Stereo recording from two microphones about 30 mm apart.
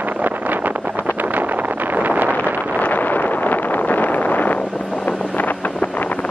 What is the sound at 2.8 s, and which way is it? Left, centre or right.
Wind noise, left.